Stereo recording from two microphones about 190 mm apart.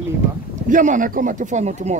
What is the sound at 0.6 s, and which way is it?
Speech, 45° right (ahead or behind).